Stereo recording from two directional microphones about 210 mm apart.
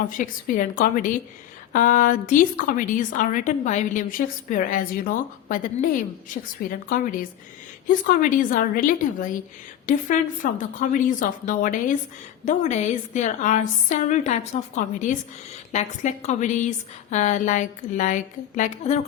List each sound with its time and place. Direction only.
0.0 s a woman's voice: 40° left (ahead or behind)